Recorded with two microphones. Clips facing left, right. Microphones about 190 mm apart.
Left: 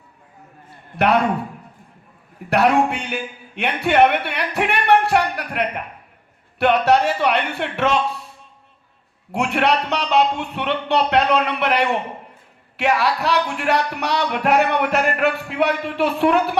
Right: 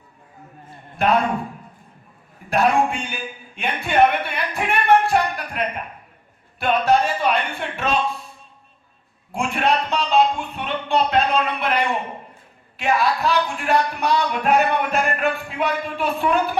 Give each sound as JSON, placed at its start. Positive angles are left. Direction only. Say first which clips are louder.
{"t": 2.5, "sound": "a man's voice", "louder": "left 2 dB", "side_deg": 70}
{"t": 9.3, "sound": "speech", "louder": "left 2 dB", "side_deg": 70}